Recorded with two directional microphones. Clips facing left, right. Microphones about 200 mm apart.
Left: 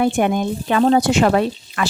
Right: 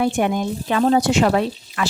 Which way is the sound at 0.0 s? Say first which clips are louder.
Left 2 dB; 55° left (ahead or behind).